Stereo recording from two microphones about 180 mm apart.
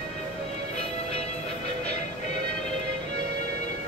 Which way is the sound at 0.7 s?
35° left (ahead or behind).